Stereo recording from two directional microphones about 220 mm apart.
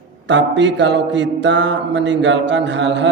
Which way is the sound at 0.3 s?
55° right (ahead or behind).